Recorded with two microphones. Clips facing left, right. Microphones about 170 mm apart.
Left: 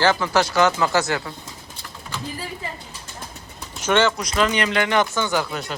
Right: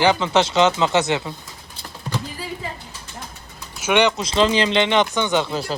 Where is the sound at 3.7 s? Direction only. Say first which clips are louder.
Right 1 dB; 10° right (ahead or behind).